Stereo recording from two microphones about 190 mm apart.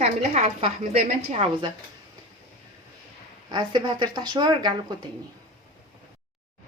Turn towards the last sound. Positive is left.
turn(degrees=-20)  # may be behind; listen again after turning